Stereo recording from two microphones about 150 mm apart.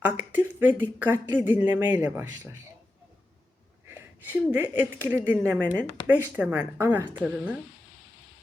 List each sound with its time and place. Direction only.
0.0 s a man's voice: 10° right (ahead or behind)
3.8 s speech: 15° right (ahead or behind)